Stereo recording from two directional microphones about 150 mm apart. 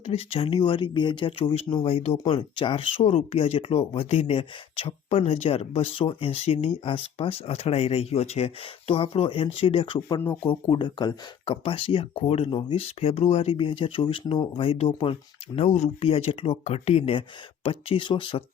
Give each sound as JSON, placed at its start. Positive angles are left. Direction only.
{"t": 0.0, "sound": "speech", "side_deg": 40}